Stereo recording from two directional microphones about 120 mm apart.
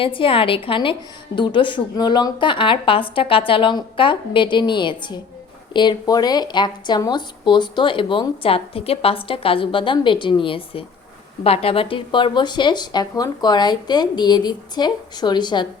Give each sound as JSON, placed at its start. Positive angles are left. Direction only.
{"t": 0.0, "sound": "speech", "side_deg": 50}